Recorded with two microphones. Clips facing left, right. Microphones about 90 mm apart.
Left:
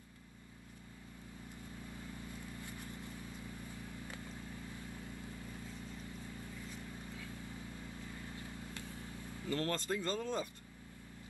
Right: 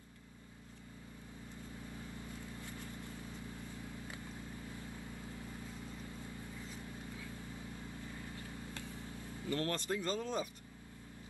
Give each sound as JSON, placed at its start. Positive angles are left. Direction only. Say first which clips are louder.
{"t": 9.5, "sound": "speech", "louder": "even", "side_deg": -20}